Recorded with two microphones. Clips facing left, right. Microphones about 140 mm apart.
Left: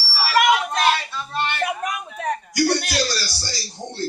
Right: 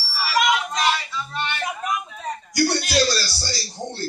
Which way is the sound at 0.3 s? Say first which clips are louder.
Left 3 dB; 60° left (ahead or behind).